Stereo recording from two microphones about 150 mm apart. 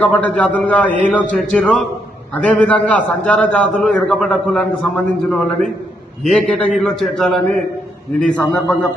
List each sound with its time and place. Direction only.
0.0 s a man's voice: 10° left (ahead or behind)